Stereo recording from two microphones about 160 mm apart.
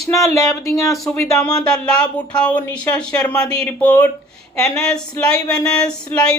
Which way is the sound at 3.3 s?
5° left (ahead or behind).